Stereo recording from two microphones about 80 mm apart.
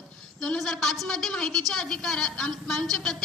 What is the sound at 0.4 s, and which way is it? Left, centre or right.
A woman's voice, centre.